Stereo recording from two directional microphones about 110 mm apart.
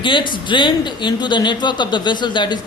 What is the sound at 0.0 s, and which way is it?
A man's voice, 50° left (ahead or behind).